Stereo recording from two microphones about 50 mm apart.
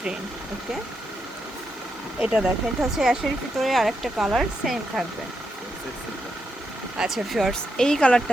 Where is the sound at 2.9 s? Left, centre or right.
Centre.